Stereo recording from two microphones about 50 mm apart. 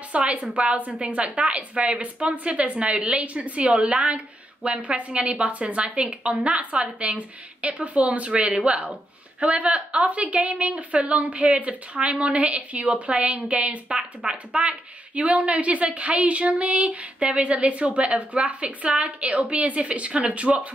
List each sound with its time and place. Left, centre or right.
0.1 s a woman's voice: right